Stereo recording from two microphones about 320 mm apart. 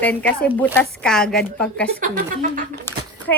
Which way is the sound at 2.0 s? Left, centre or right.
Right.